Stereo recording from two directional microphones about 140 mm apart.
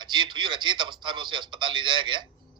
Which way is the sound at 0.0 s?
30° right (ahead or behind).